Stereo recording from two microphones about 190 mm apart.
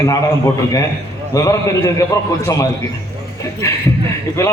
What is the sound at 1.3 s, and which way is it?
Speech, 15° left (ahead or behind).